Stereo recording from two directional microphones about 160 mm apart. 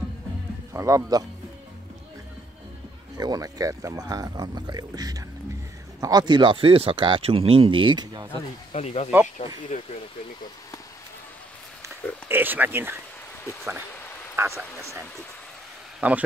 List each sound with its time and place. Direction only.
0.7 s speech: 20° right (ahead or behind)
3.2 s speech: 25° right (ahead or behind)
8.7 s speech: 40° left (ahead or behind)
9.7 s speech: 50° left (ahead or behind)
12.3 s speech: 10° right (ahead or behind)
14.3 s speech: 15° right (ahead or behind)